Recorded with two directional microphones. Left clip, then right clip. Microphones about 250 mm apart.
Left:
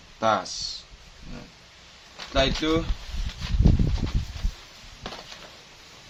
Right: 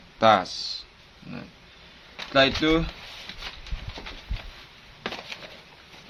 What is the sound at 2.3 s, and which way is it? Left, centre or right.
Speech, right.